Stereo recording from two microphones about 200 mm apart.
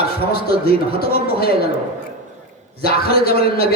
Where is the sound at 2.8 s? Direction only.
50° left (ahead or behind).